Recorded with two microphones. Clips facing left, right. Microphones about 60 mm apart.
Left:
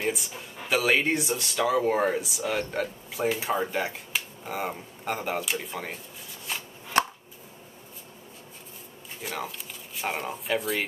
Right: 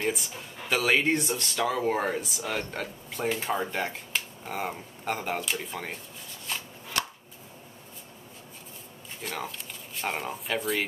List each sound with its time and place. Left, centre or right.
0.0 s speech: centre
7.0 s chopping: left
9.2 s speech: centre